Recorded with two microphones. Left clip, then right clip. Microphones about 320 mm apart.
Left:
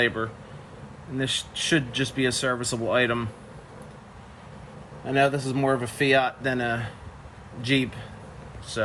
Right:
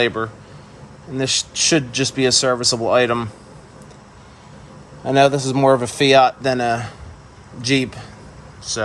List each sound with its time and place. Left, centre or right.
1.1 s speech: centre
5.0 s a man's voice: right
5.3 s speech: centre